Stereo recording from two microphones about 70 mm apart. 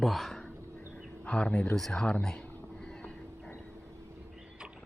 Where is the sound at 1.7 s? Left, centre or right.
Centre.